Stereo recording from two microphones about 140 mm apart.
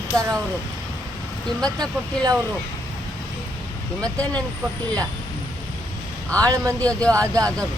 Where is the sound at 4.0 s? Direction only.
10° left (ahead or behind).